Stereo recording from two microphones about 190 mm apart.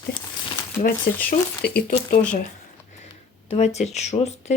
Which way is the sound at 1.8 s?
45° left (ahead or behind).